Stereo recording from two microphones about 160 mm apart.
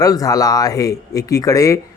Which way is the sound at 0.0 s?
25° left (ahead or behind).